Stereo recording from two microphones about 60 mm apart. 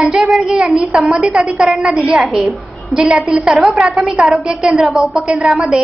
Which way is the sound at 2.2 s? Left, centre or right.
Centre.